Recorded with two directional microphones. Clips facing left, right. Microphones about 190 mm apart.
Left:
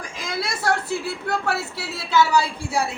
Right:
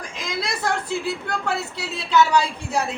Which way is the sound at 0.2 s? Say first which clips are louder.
Even; 5° left (ahead or behind).